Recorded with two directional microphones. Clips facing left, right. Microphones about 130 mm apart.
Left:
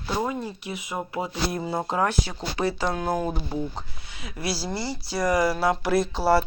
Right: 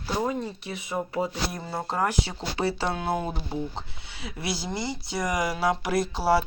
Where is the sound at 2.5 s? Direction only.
30° right (ahead or behind).